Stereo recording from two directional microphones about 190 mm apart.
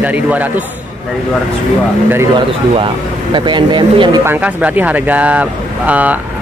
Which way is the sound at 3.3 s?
25° right (ahead or behind).